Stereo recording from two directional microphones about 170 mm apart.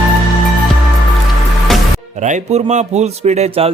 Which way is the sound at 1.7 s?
Centre (ahead or behind).